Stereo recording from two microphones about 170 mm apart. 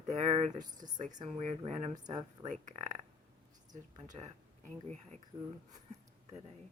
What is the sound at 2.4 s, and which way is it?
Speech, 45° right (ahead or behind).